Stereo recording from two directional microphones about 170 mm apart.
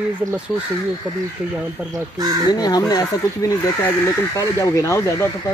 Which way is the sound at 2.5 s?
20° left (ahead or behind).